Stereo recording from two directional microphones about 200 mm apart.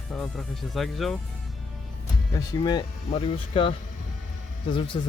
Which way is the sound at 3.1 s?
30° left (ahead or behind).